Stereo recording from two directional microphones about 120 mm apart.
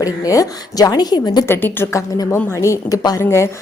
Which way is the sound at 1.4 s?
20° left (ahead or behind).